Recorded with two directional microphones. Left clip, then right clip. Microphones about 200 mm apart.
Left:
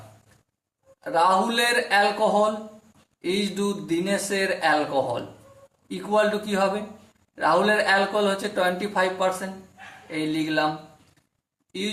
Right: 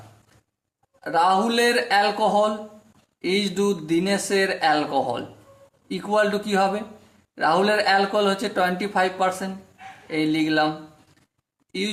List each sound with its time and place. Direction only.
1.0 s speech: 40° right (ahead or behind)